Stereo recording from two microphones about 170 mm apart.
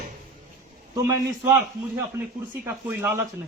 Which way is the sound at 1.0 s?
20° right (ahead or behind).